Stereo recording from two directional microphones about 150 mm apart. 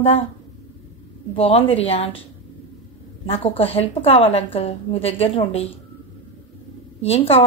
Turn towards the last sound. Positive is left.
turn(degrees=40)  # may be behind; listen again after turning